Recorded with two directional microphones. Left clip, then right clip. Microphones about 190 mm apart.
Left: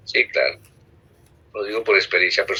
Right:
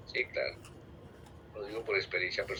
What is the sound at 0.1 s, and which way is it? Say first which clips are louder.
A man's voice: left 15 dB; 55° left (ahead or behind).